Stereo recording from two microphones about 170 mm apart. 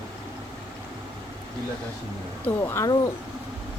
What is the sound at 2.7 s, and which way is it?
Speech, 20° left (ahead or behind).